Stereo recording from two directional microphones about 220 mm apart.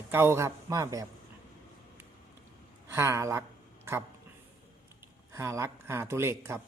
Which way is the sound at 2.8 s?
10° right (ahead or behind).